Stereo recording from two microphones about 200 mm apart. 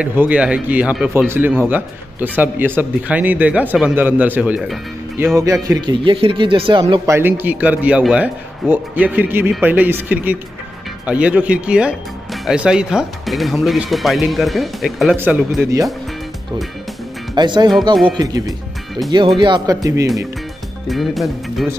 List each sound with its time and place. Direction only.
0.0 s speech: 5° right (ahead or behind); by 7.2 s 25° right (ahead or behind)
7.2 s speech: 10° right (ahead or behind)
17.4 s speech: 20° right (ahead or behind)
20.8 s speech: centre (ahead or behind)